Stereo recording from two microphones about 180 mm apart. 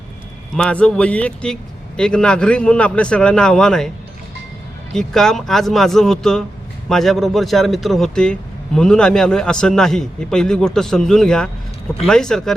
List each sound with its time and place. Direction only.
0.5 s a man's voice: 5° left (ahead or behind)